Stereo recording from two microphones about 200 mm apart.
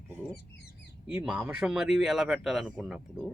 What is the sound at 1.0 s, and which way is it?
A man's voice, 5° right (ahead or behind).